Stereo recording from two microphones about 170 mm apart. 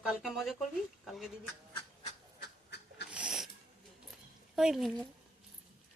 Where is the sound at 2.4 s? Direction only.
80° left.